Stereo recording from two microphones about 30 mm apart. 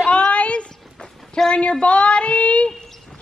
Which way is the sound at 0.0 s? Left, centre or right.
Left.